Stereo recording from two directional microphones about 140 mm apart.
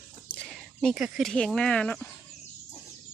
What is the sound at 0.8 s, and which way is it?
Speech, centre (ahead or behind).